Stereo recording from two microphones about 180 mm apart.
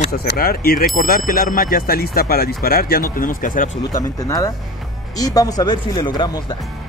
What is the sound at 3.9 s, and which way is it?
Speech, 20° left (ahead or behind).